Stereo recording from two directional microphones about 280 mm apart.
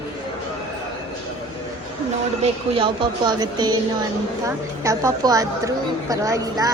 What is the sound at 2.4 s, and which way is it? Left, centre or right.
A woman's voice, centre.